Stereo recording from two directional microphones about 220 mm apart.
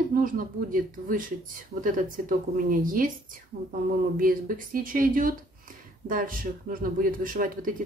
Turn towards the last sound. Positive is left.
turn(degrees=-40)  # may be behind; listen again after turning